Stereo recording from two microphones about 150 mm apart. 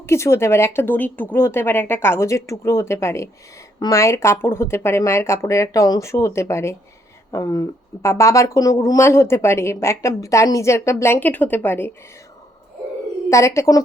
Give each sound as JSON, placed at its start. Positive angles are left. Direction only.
{"t": 0.0, "sound": "speech", "side_deg": 15}
{"t": 13.3, "sound": "speech", "side_deg": 20}